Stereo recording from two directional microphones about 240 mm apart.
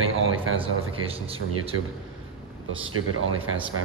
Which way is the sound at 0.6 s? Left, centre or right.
Right.